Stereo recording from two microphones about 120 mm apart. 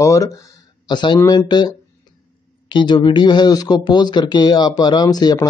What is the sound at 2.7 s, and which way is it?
Speech, 40° left (ahead or behind).